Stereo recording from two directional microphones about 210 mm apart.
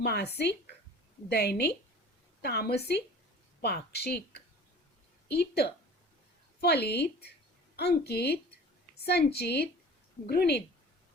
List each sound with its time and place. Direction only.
0.0 s speech: 50° left (ahead or behind)
1.3 s speech: 50° left (ahead or behind)